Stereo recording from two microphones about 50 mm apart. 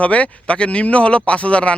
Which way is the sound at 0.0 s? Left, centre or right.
Left.